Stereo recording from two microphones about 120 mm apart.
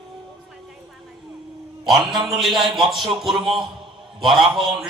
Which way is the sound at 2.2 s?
Centre (ahead or behind).